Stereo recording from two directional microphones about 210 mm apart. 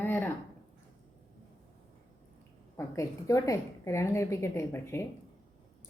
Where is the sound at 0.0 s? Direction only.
10° left (ahead or behind).